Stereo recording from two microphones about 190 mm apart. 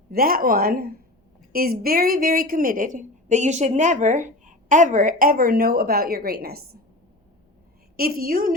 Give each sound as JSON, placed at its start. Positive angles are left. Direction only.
{"t": 0.1, "sound": "a woman's voice", "side_deg": -50}
{"t": 7.9, "sound": "a woman's voice", "side_deg": -50}